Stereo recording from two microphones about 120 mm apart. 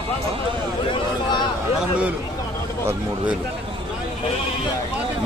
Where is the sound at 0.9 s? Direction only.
40° left (ahead or behind).